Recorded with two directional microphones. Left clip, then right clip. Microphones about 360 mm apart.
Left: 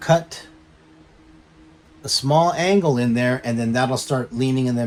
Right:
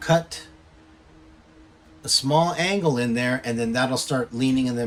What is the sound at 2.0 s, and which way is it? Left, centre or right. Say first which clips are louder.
Speech: left 3 dB; centre.